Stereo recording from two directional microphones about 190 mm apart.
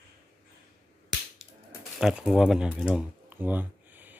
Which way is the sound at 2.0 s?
5° right (ahead or behind).